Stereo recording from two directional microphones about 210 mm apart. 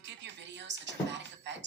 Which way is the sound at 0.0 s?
55° right (ahead or behind).